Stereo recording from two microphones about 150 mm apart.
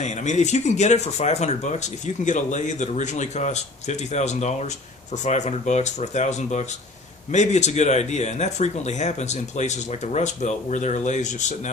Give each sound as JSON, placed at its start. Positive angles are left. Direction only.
{"t": 0.0, "sound": "speech", "side_deg": 50}